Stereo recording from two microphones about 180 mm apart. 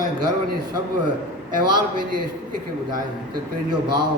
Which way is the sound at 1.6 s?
20° right (ahead or behind).